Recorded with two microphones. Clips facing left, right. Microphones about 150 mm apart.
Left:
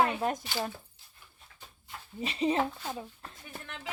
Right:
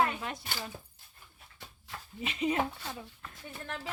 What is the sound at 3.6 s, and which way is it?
Speech, 35° right (ahead or behind).